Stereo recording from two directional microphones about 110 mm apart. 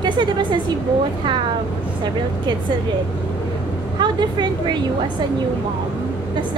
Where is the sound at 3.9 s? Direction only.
45° right (ahead or behind).